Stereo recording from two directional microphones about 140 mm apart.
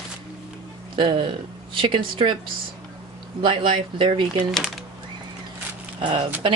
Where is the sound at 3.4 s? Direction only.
35° right (ahead or behind).